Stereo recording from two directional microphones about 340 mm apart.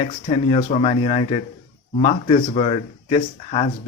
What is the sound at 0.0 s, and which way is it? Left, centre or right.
Speech, centre.